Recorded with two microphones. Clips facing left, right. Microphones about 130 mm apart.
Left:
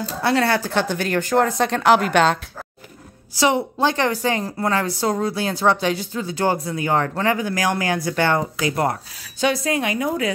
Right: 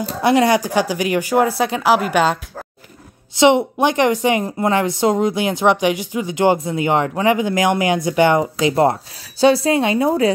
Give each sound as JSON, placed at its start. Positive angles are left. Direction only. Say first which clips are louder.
{"t": 0.2, "sound": "speech", "louder": "right 5 dB", "side_deg": -15}
{"t": 3.3, "sound": "a woman's voice", "louder": "right 6 dB", "side_deg": -20}